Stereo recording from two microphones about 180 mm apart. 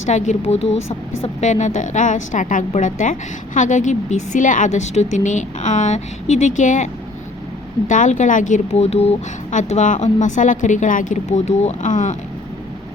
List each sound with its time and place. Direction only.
0.0 s a woman's voice: 40° left (ahead or behind)
7.9 s a woman's voice: 45° left (ahead or behind)